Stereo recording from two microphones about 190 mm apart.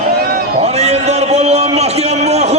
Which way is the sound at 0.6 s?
35° right (ahead or behind).